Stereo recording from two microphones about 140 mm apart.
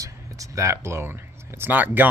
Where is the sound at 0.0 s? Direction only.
20° right (ahead or behind).